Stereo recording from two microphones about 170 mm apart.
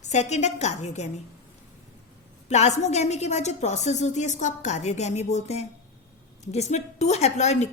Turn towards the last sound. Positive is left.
turn(degrees=40)  # may be behind; listen again after turning